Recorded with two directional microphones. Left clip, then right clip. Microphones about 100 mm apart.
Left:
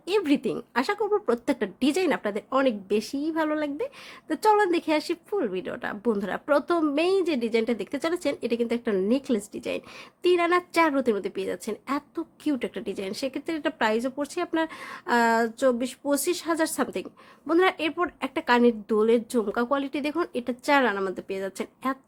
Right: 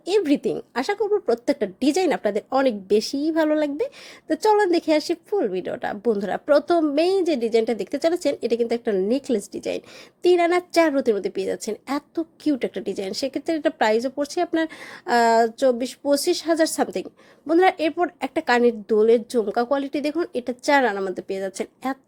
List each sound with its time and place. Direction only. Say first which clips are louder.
0.0 s a woman's voice: right 4 dB; 20° right (ahead or behind)
4.4 s a woman's voice: right 3 dB; 20° right (ahead or behind)